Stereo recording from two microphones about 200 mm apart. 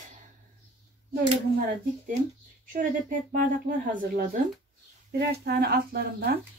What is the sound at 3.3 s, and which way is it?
Speech, 40° right (ahead or behind).